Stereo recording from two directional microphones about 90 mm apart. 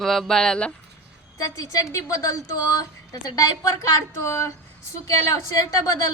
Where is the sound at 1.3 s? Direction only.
40° left (ahead or behind).